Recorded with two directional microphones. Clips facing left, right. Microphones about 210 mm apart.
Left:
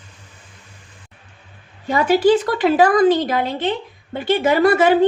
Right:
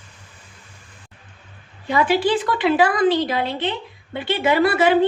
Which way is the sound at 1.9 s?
45° left (ahead or behind).